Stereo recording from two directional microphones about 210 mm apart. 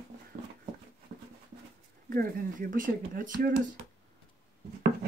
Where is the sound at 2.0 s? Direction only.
45° right (ahead or behind).